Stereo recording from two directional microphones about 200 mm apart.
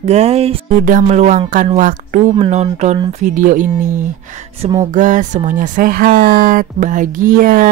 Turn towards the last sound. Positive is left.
turn(degrees=-45)  # may be behind; listen again after turning